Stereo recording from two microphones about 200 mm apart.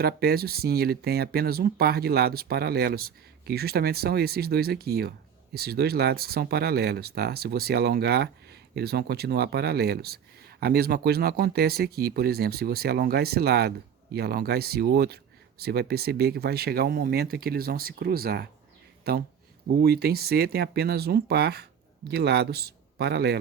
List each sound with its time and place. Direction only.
0.0 s speech: 50° right (ahead or behind)